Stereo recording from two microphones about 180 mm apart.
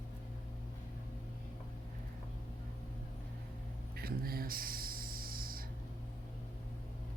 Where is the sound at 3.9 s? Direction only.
55° right (ahead or behind).